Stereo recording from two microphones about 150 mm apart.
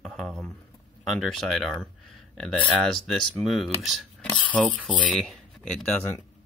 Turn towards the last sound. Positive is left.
turn(degrees=15)  # may be behind; listen again after turning